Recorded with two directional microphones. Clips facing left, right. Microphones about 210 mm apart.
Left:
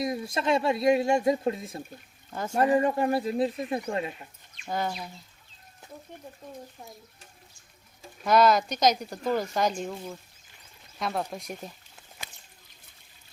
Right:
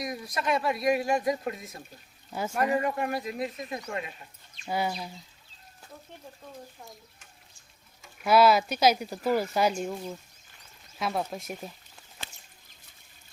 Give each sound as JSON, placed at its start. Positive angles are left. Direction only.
{"t": 0.0, "sound": "speech", "side_deg": 25}
{"t": 4.6, "sound": "speech", "side_deg": -10}
{"t": 8.2, "sound": "speech", "side_deg": -5}